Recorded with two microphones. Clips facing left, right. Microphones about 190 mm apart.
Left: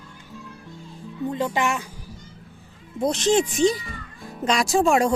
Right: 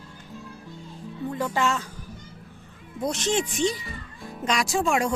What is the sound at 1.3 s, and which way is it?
Speech, 20° left (ahead or behind).